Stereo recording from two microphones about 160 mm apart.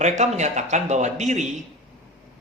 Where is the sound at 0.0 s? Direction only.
45° right (ahead or behind).